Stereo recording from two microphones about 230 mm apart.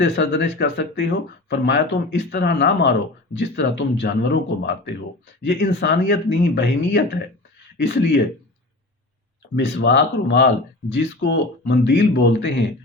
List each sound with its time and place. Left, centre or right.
0.0 s speech: left
9.6 s speech: left